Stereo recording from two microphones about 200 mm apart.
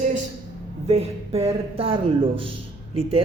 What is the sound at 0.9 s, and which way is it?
Speech, 30° right (ahead or behind).